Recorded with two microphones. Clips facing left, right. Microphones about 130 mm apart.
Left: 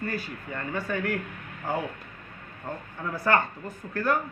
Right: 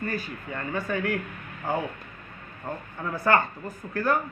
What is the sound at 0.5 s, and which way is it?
A man's voice, 45° right (ahead or behind).